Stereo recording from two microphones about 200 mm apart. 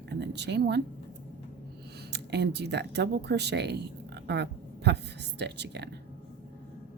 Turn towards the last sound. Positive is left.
turn(degrees=-55)  # may be behind; listen again after turning